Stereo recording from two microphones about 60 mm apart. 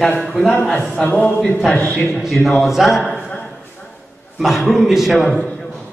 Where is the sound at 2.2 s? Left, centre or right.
Centre.